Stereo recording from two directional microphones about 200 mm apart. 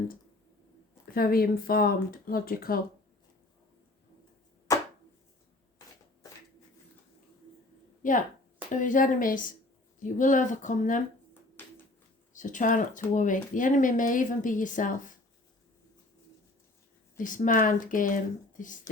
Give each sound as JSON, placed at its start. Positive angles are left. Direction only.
{"t": 1.1, "sound": "speech", "side_deg": 45}
{"t": 4.7, "sound": "chopping", "side_deg": 15}
{"t": 8.0, "sound": "speech", "side_deg": 40}
{"t": 12.3, "sound": "speech", "side_deg": 40}
{"t": 17.2, "sound": "speech", "side_deg": 40}